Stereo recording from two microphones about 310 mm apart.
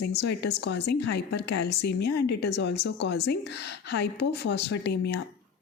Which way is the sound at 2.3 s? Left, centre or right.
Left.